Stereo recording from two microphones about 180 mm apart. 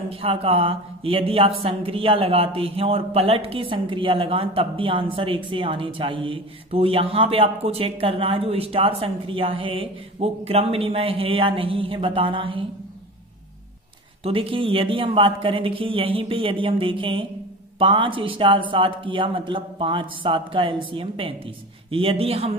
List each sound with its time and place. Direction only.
0.1 s speech: 30° right (ahead or behind)
14.2 s speech: 30° right (ahead or behind)